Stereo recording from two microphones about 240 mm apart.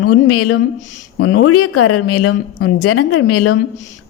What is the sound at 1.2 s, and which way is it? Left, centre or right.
A woman's voice, left.